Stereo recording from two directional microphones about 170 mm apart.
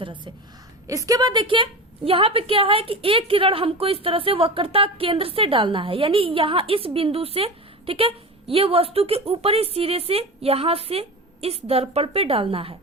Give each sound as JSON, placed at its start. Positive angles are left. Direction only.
{"t": 0.9, "sound": "a woman's voice", "side_deg": -20}